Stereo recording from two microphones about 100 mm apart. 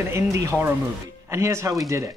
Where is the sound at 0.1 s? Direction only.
30° right (ahead or behind).